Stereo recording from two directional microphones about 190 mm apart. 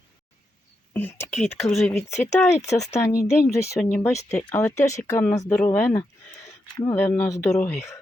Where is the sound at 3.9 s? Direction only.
10° left (ahead or behind).